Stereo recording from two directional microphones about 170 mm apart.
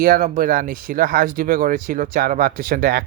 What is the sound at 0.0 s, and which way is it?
Speech, 55° right (ahead or behind).